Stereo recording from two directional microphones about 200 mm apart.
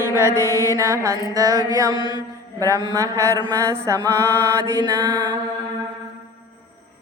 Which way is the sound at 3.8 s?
15° right (ahead or behind).